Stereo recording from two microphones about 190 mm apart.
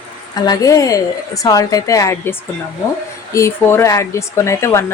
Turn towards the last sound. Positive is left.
turn(degrees=15)  # may be behind; listen again after turning